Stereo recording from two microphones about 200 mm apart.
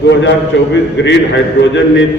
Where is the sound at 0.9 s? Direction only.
60° left (ahead or behind).